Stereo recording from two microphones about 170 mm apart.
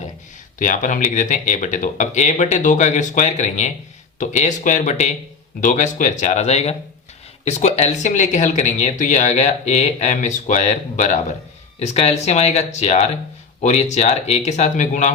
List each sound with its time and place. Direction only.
0.6 s speech: 50° left (ahead or behind)